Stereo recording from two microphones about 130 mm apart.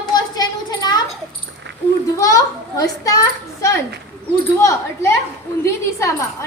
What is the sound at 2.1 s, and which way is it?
A woman's voice, 25° left (ahead or behind).